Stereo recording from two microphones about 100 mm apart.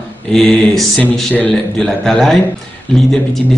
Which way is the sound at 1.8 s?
5° left (ahead or behind).